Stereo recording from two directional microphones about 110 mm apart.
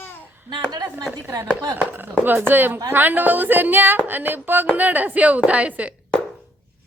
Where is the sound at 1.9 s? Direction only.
20° right (ahead or behind).